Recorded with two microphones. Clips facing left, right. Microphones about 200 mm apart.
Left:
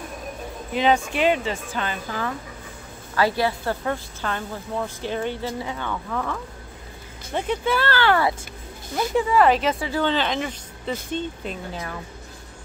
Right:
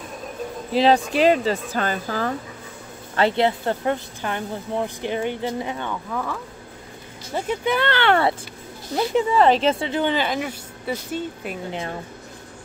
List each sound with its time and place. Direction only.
0.7 s speech: 35° right (ahead or behind)
3.2 s a woman's voice: 25° right (ahead or behind)
6.0 s speech: 5° right (ahead or behind)
7.7 s a woman's voice: 20° right (ahead or behind)
11.7 s a woman's voice: 25° right (ahead or behind)